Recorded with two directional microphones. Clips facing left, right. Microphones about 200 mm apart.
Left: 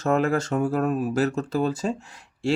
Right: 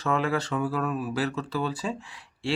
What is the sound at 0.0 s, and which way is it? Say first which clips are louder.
Speech: left 4 dB; 45° left (ahead or behind).